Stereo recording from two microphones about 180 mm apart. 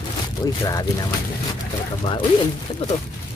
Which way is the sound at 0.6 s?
20° left (ahead or behind).